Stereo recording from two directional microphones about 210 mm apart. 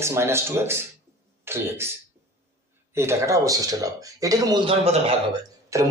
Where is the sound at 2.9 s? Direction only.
10° right (ahead or behind).